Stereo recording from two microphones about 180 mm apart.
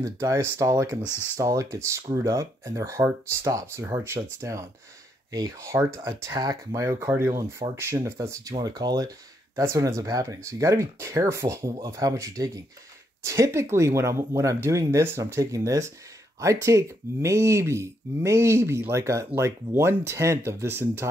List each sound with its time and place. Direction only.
0.0 s speech: 15° right (ahead or behind)